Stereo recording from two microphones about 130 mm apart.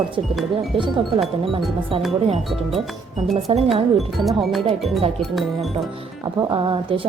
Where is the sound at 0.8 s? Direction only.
40° right (ahead or behind).